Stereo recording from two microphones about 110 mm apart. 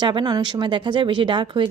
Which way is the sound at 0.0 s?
45° right (ahead or behind).